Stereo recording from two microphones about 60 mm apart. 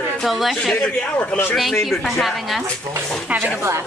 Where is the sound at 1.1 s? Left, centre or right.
Left.